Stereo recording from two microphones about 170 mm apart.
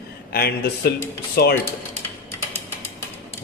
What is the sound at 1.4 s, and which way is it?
Speech, 70° left (ahead or behind).